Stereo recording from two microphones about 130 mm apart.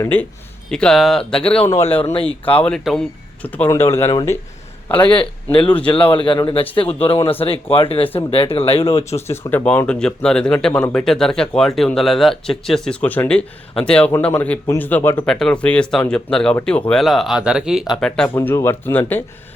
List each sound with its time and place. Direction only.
0.0 s speech: 15° left (ahead or behind)
0.7 s speech: 5° left (ahead or behind)
2.1 s speech: 45° left (ahead or behind)
2.6 s speech: 5° left (ahead or behind); by 4.1 s 20° left (ahead or behind)
4.9 s a man's voice: 40° left (ahead or behind)
9.2 s speech: 20° left (ahead or behind)
9.6 s speech: 5° left (ahead or behind)
18.3 s speech: 20° left (ahead or behind)